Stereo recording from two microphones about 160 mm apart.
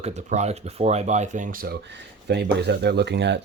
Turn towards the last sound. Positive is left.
turn(degrees=-90)